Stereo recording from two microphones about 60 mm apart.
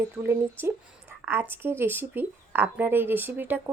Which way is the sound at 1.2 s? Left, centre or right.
Right.